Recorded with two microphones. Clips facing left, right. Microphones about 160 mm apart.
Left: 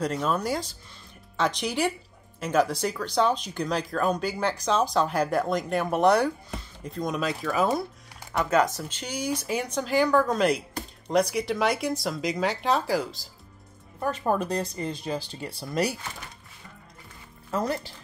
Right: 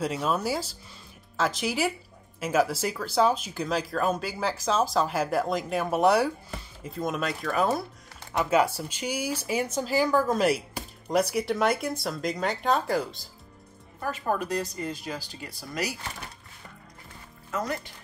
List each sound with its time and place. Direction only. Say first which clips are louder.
0.0 s speech: left 1 dB; 5° right (ahead or behind)
8.3 s speech: even; 10° right (ahead or behind)
15.1 s speech: left 5 dB; 30° left (ahead or behind)
17.5 s speech: left 3 dB; 30° left (ahead or behind)